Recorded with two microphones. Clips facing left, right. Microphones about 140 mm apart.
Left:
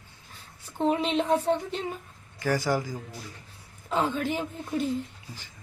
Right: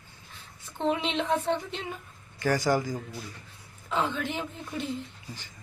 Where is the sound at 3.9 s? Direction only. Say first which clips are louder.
Left 3 dB; 40° left (ahead or behind).